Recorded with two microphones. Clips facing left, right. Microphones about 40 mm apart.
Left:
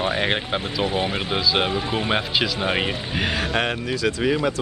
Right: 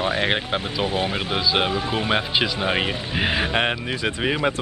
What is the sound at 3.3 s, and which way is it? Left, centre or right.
Speech, centre.